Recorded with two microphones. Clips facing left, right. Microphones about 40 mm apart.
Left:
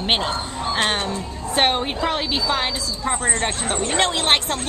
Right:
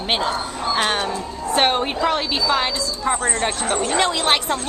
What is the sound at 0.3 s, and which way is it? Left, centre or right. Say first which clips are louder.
Speech: right 2 dB; left.